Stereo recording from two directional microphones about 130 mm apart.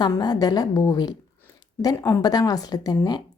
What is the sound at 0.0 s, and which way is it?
A woman's voice, 30° left (ahead or behind).